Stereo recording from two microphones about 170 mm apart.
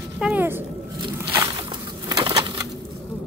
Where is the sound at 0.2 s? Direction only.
10° right (ahead or behind).